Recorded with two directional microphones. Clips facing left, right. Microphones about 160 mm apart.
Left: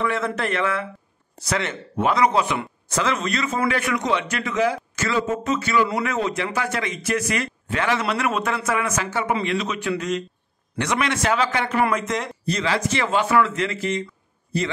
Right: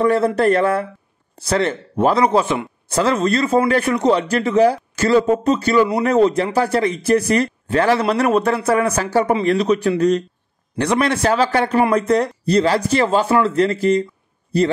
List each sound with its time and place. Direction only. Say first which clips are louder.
0.0 s speech: right 9 dB; 35° right (ahead or behind)